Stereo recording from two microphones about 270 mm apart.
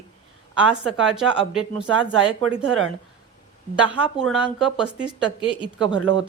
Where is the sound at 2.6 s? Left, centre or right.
Right.